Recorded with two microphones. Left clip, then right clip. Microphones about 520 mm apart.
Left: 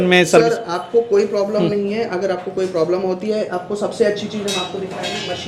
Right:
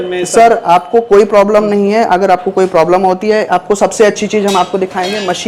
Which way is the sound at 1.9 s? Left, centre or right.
Right.